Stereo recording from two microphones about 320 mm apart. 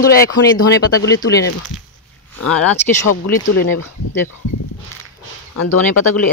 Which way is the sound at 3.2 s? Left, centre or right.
Left.